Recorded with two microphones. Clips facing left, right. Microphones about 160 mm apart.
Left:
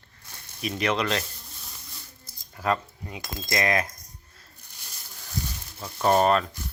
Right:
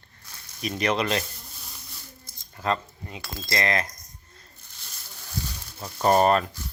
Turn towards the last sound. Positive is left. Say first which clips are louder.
# right 1 dB
turn(degrees=-5)  # may be behind; listen again after turning